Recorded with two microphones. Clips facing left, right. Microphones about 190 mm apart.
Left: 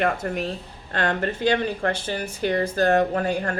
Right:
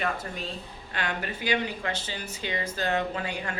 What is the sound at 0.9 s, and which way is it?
Speech, 55° left (ahead or behind).